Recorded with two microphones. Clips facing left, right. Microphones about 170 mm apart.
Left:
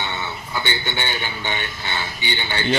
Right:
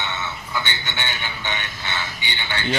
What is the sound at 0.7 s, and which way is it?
Speech, 40° left (ahead or behind).